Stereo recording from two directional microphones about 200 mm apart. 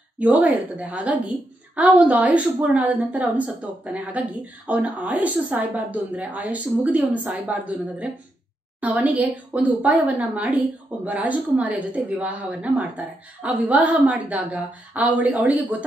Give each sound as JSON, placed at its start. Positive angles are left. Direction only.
{"t": 0.2, "sound": "speech", "side_deg": -5}